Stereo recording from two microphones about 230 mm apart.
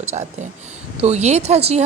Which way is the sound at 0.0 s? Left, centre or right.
Right.